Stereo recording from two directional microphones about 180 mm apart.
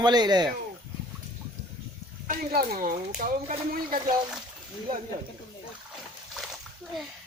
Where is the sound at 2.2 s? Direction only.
55° right (ahead or behind).